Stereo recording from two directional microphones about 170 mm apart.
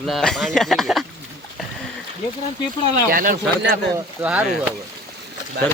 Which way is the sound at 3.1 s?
55° right (ahead or behind).